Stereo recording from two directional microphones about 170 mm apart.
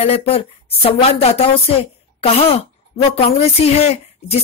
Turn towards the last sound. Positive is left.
turn(degrees=35)  # may be behind; listen again after turning